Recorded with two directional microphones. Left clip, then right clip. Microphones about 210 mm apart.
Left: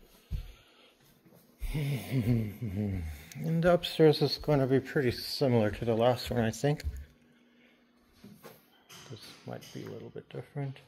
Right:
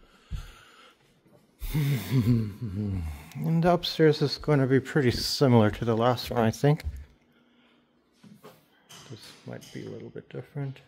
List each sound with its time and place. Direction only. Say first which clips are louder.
0.4 s a sound: right 7 dB; 50° right (ahead or behind)
1.7 s speech: right 5 dB; 50° right (ahead or behind)
2.8 s speech: right 2 dB; 35° right (ahead or behind)
9.5 s speech: right 2 dB; 15° right (ahead or behind)